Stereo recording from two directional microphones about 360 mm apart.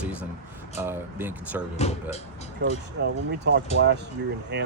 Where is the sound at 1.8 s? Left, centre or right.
Centre.